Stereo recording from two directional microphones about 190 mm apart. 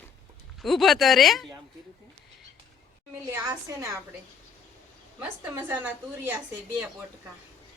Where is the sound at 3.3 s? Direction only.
15° right (ahead or behind).